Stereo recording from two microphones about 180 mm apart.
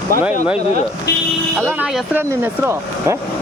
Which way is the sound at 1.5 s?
15° right (ahead or behind).